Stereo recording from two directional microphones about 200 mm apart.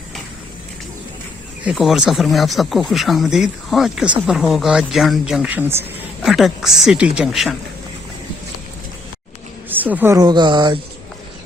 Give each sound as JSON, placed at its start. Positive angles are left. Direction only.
{"t": 1.6, "sound": "speech", "side_deg": 0}
{"t": 9.6, "sound": "speech", "side_deg": -10}